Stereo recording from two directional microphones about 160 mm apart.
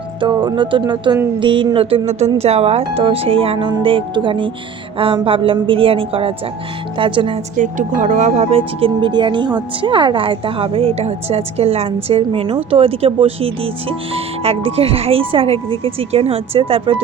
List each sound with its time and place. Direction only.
0.2 s speech: 30° right (ahead or behind)
7.5 s speech: 55° right (ahead or behind); by 17.0 s 35° right (ahead or behind)